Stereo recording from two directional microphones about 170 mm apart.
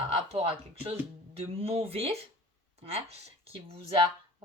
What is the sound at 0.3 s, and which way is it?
Speech, 35° right (ahead or behind).